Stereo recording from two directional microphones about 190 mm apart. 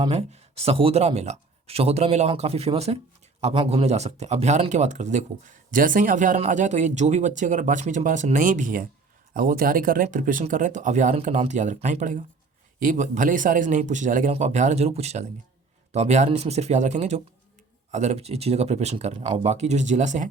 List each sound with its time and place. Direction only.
0.1 s speech: 35° right (ahead or behind)